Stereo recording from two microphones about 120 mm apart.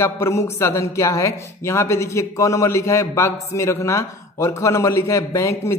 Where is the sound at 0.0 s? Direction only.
20° left (ahead or behind).